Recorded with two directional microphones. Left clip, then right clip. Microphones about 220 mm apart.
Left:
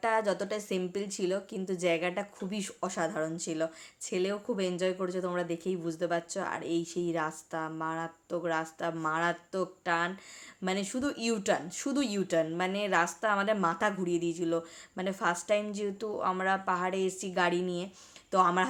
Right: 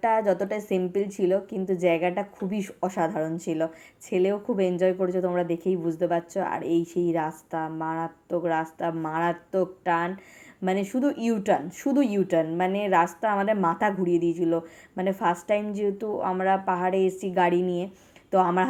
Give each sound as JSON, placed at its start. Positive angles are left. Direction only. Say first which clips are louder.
{"t": 0.0, "sound": "speech", "louder": "right 6 dB", "side_deg": 5}